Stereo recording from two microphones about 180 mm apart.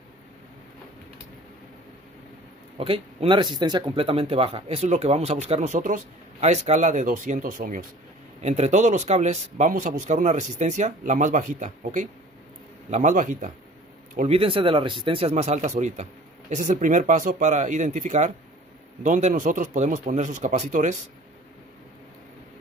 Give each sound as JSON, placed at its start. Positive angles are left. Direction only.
{"t": 2.8, "sound": "speech", "side_deg": -30}